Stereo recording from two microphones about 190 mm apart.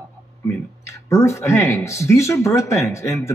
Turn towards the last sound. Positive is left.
turn(degrees=15)  # may be behind; listen again after turning